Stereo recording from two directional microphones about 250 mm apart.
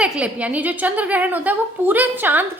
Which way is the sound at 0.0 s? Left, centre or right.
Centre.